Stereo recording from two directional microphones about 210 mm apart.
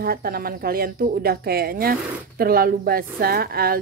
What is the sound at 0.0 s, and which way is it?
Speech, 45° right (ahead or behind).